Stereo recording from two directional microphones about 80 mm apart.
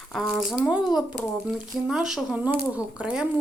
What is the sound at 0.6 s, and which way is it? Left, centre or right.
Speech, centre.